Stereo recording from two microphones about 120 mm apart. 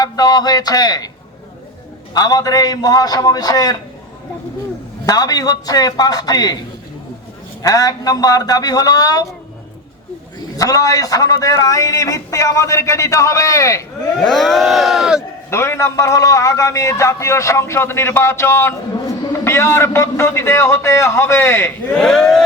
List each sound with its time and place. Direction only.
0.0 s speech: 35° left (ahead or behind)
2.1 s speech: 30° left (ahead or behind)
5.0 s speech: 30° left (ahead or behind)
7.6 s speech: 30° left (ahead or behind)
10.6 s a man's voice: 30° left (ahead or behind)
14.2 s speech: centre (ahead or behind)
15.4 s a man's voice: 20° left (ahead or behind)
21.9 s speech: 5° left (ahead or behind)